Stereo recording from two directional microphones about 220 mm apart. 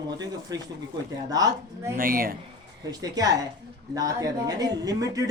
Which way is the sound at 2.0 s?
40° right (ahead or behind).